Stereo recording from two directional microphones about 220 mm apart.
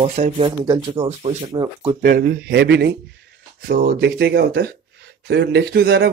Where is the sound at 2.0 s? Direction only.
40° right (ahead or behind).